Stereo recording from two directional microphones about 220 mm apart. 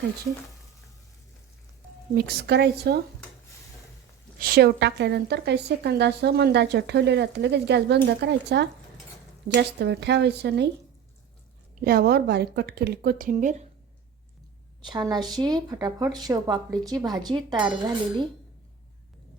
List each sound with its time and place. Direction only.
2.1 s speech: 45° right (ahead or behind)
4.4 s speech: 45° right (ahead or behind)
11.9 s speech: 45° right (ahead or behind)
14.8 s speech: 20° right (ahead or behind)